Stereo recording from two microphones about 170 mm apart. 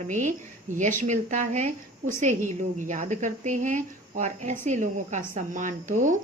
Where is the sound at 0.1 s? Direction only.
45° right (ahead or behind).